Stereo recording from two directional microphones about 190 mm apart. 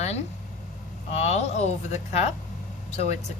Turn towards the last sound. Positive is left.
turn(degrees=35)  # may be behind; listen again after turning